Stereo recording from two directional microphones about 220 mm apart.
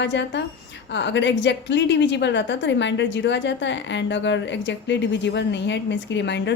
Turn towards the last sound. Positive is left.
turn(degrees=55)  # may be behind; listen again after turning